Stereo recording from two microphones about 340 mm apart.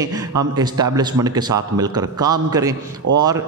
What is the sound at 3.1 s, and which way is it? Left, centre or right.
Speech, right.